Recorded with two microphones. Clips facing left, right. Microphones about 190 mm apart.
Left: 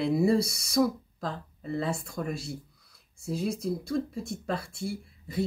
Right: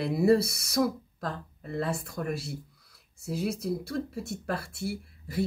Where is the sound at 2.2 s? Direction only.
65° right (ahead or behind).